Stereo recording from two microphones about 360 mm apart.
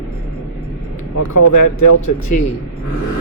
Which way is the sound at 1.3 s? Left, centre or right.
Left.